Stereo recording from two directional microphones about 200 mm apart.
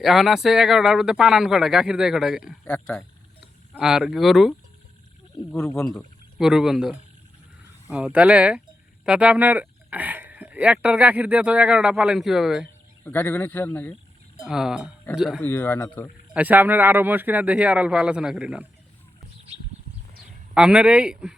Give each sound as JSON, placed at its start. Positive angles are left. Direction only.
{"t": 0.0, "sound": "speech", "side_deg": 0}
{"t": 13.1, "sound": "speech", "side_deg": 10}
{"t": 14.4, "sound": "speech", "side_deg": -5}
{"t": 15.4, "sound": "speech", "side_deg": 10}
{"t": 16.3, "sound": "speech", "side_deg": -10}
{"t": 20.5, "sound": "speech", "side_deg": -5}